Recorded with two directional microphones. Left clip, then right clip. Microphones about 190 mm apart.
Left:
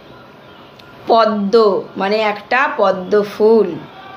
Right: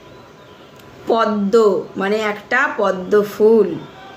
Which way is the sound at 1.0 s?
20° right (ahead or behind).